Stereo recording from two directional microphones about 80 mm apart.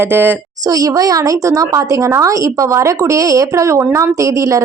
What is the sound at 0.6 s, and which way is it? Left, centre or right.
A woman's voice, right.